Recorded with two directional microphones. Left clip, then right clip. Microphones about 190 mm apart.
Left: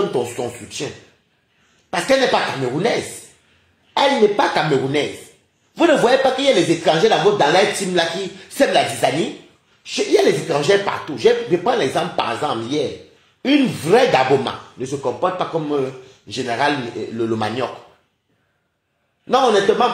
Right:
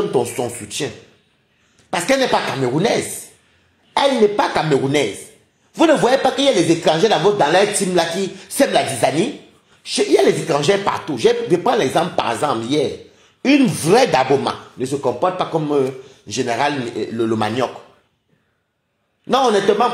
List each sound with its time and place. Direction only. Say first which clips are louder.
0.1 s speech: right 3 dB; 35° right (ahead or behind)
1.9 s speech: even; 35° right (ahead or behind)
6.0 s speech: even; 35° right (ahead or behind)
9.8 s speech: right 1 dB; 40° right (ahead or behind)
19.2 s speech: even; 40° right (ahead or behind)